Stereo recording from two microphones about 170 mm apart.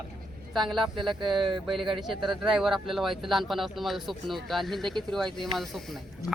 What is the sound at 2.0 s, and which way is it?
Speech, centre (ahead or behind).